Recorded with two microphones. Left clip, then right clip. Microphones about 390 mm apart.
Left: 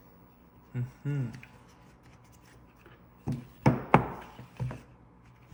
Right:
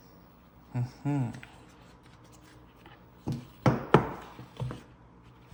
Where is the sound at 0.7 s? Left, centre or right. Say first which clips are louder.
Right 6 dB; centre.